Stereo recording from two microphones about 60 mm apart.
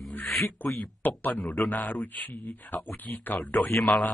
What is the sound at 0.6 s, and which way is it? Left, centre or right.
Speech, left.